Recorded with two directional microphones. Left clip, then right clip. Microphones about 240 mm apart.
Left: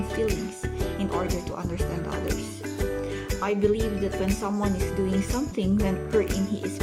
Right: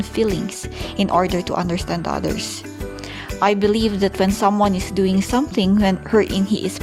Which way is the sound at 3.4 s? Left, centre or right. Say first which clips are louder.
Right 8 dB; right.